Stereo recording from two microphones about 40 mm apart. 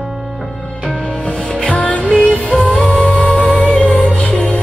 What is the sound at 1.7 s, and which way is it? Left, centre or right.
Music, left.